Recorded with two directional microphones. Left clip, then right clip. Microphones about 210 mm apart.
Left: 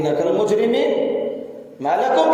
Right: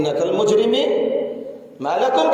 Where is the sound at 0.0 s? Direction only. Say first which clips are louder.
Even; 10° right (ahead or behind).